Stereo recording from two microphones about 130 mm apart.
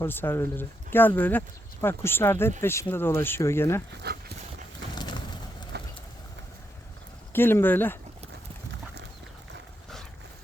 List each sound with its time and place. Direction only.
0.0 s speech: 15° left (ahead or behind)
7.3 s speech: 15° left (ahead or behind)